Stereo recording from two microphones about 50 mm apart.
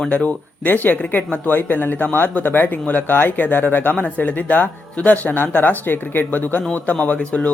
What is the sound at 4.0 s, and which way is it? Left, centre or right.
Speech, left.